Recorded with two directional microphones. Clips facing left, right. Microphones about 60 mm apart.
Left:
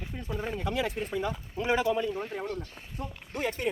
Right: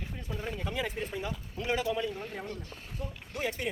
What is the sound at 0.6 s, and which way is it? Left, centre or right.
Speech, left.